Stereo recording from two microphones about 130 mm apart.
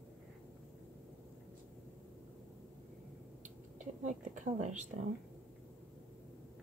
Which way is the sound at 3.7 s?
70° right (ahead or behind).